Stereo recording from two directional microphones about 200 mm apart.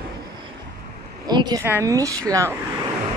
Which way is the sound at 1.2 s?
20° right (ahead or behind).